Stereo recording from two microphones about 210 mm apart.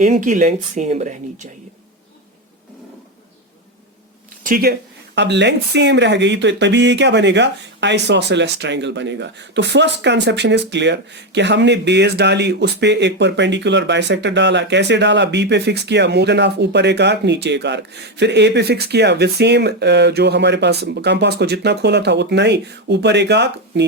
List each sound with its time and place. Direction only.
0.0 s speech: 35° right (ahead or behind)
4.4 s speech: 45° right (ahead or behind)